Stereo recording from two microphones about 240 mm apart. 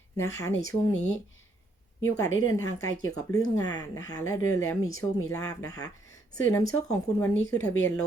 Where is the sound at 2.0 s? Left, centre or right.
Centre.